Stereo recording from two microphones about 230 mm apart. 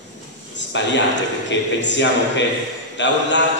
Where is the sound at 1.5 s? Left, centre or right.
Left.